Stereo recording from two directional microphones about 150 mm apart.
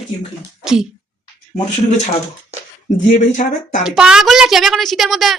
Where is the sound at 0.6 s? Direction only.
5° right (ahead or behind).